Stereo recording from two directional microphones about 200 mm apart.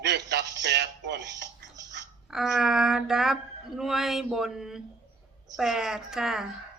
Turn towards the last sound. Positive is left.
turn(degrees=0)  # may be behind; listen again after turning